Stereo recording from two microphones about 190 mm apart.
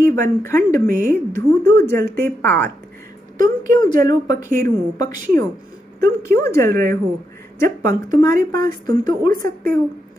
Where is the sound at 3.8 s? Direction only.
20° left (ahead or behind).